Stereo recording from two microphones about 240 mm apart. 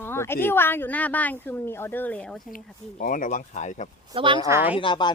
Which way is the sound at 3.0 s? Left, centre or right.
Left.